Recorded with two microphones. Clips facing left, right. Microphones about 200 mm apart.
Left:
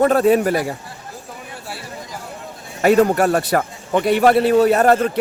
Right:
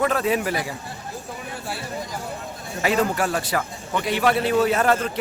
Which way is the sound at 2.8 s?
50° left (ahead or behind).